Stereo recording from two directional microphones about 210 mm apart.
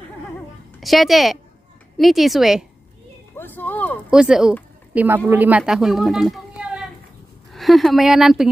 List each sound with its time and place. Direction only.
0.7 s speech: centre (ahead or behind)
3.3 s a sound: 10° left (ahead or behind)
4.1 s speech: 5° right (ahead or behind)